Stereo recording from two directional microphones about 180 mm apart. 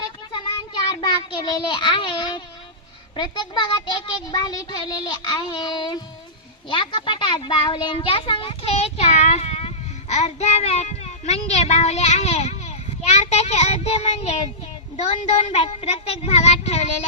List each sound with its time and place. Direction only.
0.3 s child singing: 25° left (ahead or behind)
3.2 s a child's voice: 25° left (ahead or behind)